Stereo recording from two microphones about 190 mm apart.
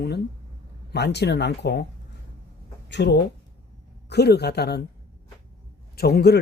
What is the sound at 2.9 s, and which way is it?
Speech, 65° left (ahead or behind).